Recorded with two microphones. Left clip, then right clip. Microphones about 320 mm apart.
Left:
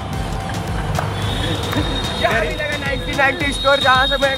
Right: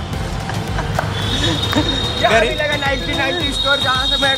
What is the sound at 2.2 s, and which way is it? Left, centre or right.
Speech, centre.